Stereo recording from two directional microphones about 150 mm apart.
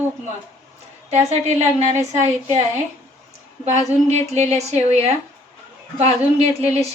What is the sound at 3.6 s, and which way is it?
A woman's voice, 50° right (ahead or behind).